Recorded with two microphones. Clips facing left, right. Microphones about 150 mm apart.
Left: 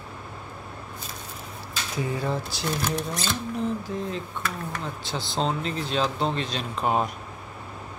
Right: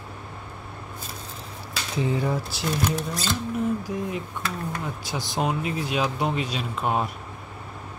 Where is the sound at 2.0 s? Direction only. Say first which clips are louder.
Right 3 dB; 20° right (ahead or behind).